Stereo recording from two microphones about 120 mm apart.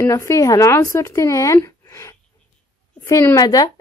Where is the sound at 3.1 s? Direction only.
25° left (ahead or behind).